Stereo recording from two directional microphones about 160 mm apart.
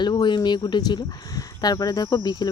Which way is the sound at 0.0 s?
30° left (ahead or behind).